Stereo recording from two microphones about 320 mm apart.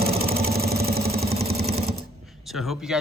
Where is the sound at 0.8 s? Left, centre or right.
Right.